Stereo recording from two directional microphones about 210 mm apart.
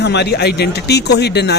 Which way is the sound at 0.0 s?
55° left (ahead or behind).